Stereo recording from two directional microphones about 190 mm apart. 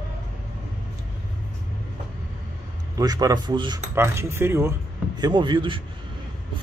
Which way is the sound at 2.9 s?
20° right (ahead or behind).